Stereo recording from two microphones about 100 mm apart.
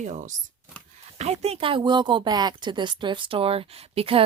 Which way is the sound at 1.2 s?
90° right.